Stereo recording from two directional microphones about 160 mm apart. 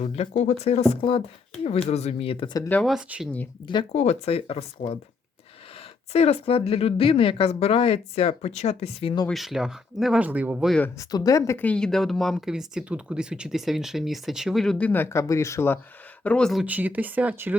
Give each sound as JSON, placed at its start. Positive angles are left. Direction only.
{"t": 0.0, "sound": "speech", "side_deg": 45}
{"t": 2.6, "sound": "speech", "side_deg": 10}
{"t": 2.9, "sound": "speech", "side_deg": -5}
{"t": 3.9, "sound": "speech", "side_deg": 45}
{"t": 6.1, "sound": "speech", "side_deg": 40}
{"t": 9.2, "sound": "speech", "side_deg": 0}
{"t": 10.8, "sound": "speech", "side_deg": 15}
{"t": 16.2, "sound": "speech", "side_deg": 5}
{"t": 16.6, "sound": "speech", "side_deg": -10}